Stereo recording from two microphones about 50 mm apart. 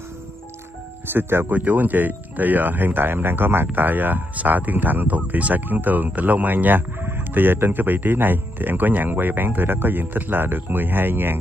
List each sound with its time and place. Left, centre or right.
1.1 s speech: right
1.5 s speech: right